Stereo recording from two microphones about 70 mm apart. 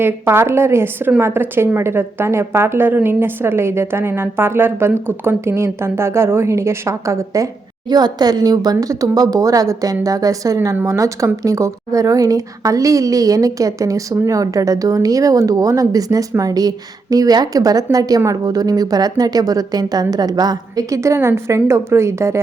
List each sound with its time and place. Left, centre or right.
0.0 s a woman's voice: right
7.9 s a woman's voice: right
20.9 s a woman's voice: right